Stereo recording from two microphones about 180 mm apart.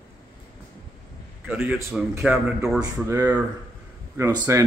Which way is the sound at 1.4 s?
10° right (ahead or behind).